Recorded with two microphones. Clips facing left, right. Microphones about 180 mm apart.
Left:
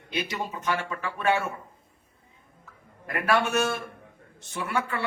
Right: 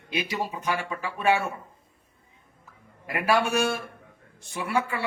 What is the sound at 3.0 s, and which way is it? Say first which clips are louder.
A man's voice: right 1 dB; 5° right (ahead or behind).